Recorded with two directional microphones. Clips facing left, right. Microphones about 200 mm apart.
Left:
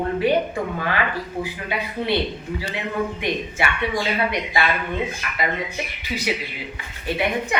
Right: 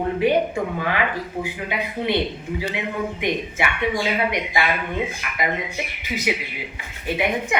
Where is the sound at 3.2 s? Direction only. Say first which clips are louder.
Right 1 dB; 15° right (ahead or behind).